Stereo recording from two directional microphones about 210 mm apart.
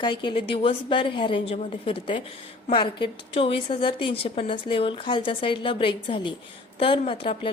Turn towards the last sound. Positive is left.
turn(degrees=25)  # may be behind; listen again after turning